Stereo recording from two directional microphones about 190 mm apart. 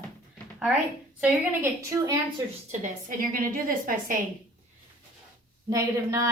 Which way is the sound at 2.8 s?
45° right (ahead or behind).